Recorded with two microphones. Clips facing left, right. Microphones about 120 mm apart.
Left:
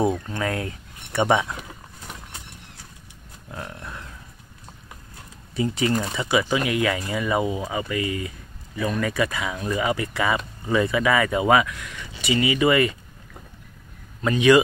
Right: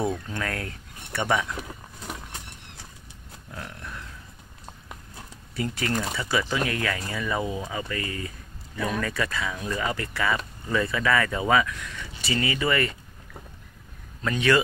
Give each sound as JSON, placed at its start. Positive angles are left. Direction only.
{"t": 0.0, "sound": "speech", "side_deg": 15}
{"t": 5.6, "sound": "speech", "side_deg": 15}
{"t": 9.0, "sound": "speech", "side_deg": 15}